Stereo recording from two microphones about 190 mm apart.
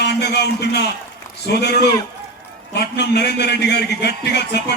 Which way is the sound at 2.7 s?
60° left (ahead or behind).